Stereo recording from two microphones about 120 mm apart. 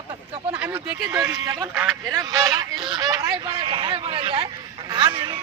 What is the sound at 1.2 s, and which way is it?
Speech, 25° right (ahead or behind).